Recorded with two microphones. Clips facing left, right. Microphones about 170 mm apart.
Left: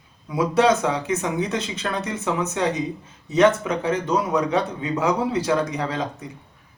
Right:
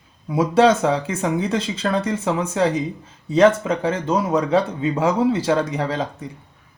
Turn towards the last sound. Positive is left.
turn(degrees=-30)  # may be behind; listen again after turning